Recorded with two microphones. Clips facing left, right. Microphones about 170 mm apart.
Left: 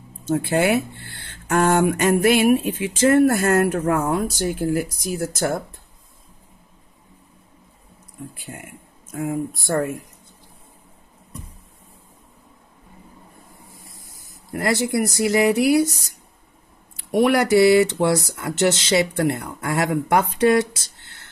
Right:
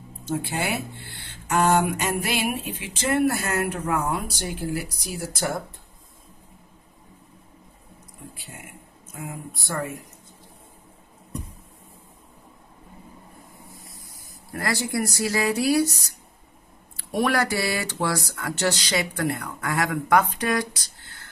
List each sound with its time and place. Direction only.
0.3 s speech: 60° left (ahead or behind)
9.2 s speech: 45° left (ahead or behind)
14.5 s speech: 20° left (ahead or behind)
16.9 s speech: 20° left (ahead or behind)